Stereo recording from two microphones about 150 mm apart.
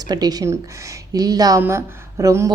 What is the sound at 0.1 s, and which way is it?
A woman's voice, 25° right (ahead or behind).